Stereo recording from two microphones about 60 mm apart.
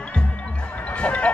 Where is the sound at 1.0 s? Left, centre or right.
Centre.